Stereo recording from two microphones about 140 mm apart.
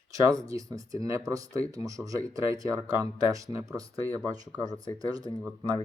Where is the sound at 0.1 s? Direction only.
25° right (ahead or behind).